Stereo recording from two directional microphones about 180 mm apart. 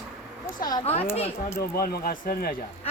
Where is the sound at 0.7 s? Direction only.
35° left (ahead or behind).